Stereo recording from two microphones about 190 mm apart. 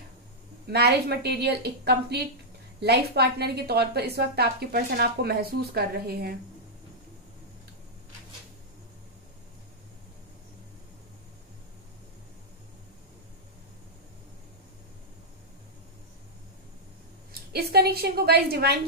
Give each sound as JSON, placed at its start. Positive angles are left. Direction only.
{"t": 0.7, "sound": "a woman's voice", "side_deg": -60}
{"t": 17.3, "sound": "a woman's voice", "side_deg": -55}